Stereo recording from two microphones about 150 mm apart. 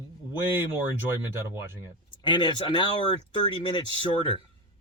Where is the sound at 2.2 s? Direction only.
30° left (ahead or behind).